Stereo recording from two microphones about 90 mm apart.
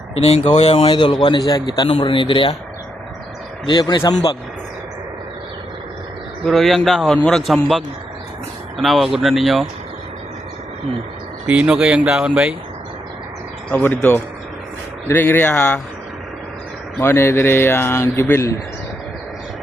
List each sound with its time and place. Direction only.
0.7 s a man's voice: 60° left (ahead or behind)
1.9 s speech: 70° left (ahead or behind)
3.7 s speech: 50° left (ahead or behind)
6.4 s speech: centre (ahead or behind)
11.4 s speech: 15° right (ahead or behind)
13.8 s speech: 20° left (ahead or behind)
15.5 s speech: 10° left (ahead or behind)
17.0 s speech: 25° left (ahead or behind)